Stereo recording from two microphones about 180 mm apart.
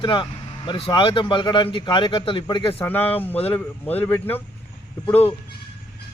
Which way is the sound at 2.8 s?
10° left (ahead or behind).